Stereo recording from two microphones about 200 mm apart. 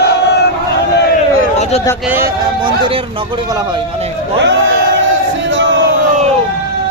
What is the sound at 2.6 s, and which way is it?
Speech, 25° right (ahead or behind).